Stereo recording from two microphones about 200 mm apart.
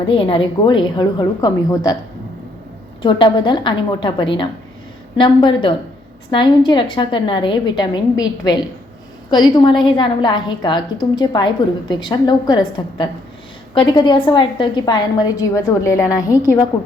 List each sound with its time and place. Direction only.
0.1 s a woman's voice: 25° left (ahead or behind)
3.0 s a woman's voice: 25° left (ahead or behind)